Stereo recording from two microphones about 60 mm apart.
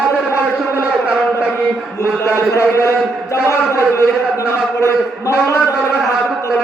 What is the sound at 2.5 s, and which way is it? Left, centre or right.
Speech, left.